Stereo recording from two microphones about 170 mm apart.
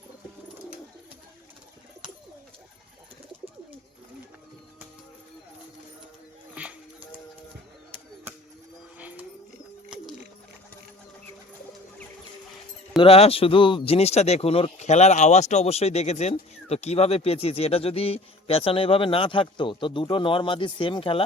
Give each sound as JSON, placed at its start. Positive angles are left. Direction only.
{"t": 6.5, "sound": "dog", "side_deg": -5}
{"t": 9.0, "sound": "a sound", "side_deg": -10}
{"t": 13.0, "sound": "speech", "side_deg": 35}